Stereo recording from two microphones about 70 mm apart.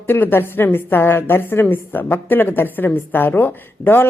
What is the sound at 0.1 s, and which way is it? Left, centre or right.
A woman's voice, left.